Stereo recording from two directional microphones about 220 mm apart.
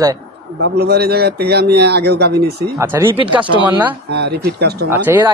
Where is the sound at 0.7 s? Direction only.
45° right (ahead or behind).